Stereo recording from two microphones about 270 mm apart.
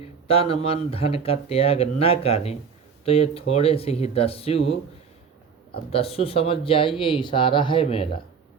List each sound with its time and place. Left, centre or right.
0.3 s speech: left
5.9 s speech: left